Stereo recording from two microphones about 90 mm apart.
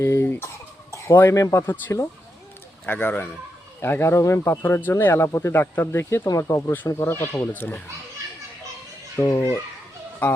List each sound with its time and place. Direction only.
0.0 s speech: 30° left (ahead or behind)
6.2 s speech: 45° left (ahead or behind)
6.8 s speech: 30° left (ahead or behind)
9.1 s speech: 35° left (ahead or behind)